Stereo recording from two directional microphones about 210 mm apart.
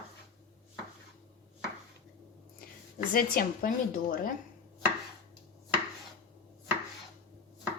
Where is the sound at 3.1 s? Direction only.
45° left (ahead or behind).